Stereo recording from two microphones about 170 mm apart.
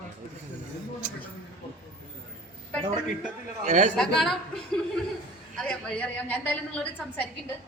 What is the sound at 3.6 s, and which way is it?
Speech, 45° right (ahead or behind).